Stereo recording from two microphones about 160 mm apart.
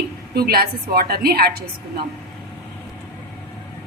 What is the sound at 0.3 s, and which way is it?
A woman's voice, 75° right (ahead or behind).